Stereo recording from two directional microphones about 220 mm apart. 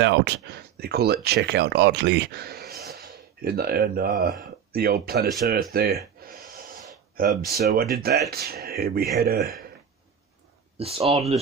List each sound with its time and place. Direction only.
0.0 s speech: 50° right (ahead or behind)
10.8 s speech: 25° right (ahead or behind)